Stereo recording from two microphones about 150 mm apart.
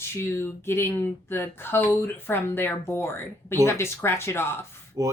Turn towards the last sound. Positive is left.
turn(degrees=-25)  # may be behind; listen again after turning